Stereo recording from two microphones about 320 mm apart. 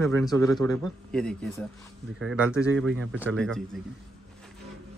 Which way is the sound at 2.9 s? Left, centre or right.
Right.